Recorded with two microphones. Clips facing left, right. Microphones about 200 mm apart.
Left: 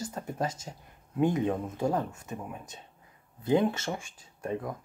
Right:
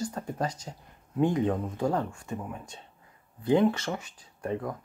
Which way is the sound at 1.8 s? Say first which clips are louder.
Even; 20° left (ahead or behind).